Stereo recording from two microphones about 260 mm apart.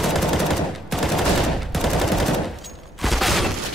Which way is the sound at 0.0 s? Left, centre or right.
Centre.